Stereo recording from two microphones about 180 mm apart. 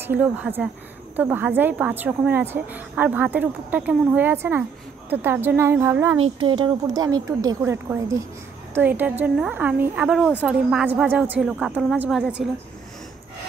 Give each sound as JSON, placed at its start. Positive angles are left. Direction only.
{"t": 0.0, "sound": "a woman's voice", "side_deg": -10}
{"t": 6.2, "sound": "a woman's voice", "side_deg": -25}